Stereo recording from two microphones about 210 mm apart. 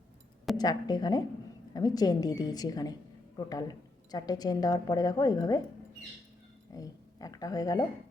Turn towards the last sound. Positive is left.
turn(degrees=15)  # may be behind; listen again after turning